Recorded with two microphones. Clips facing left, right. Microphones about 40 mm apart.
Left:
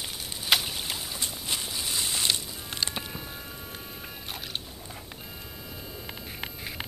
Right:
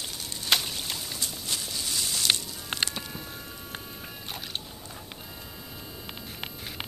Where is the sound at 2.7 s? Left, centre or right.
Right.